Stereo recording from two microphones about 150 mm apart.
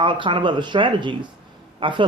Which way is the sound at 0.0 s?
35° right (ahead or behind).